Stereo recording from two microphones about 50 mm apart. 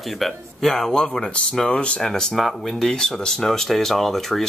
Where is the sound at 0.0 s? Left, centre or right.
Centre; by 2.0 s left.